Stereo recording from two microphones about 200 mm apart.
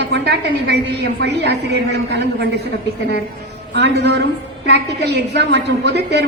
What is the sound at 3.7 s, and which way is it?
A woman's voice, 60° right (ahead or behind).